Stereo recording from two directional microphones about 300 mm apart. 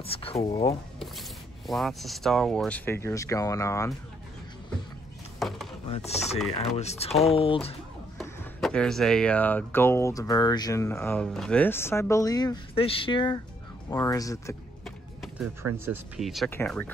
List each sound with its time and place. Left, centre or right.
0.0 s speech: centre
1.7 s speech: centre
5.4 s chopping: centre
5.9 s mechanisms: left
6.8 s speech: left
8.2 s speech: centre
15.8 s speech: centre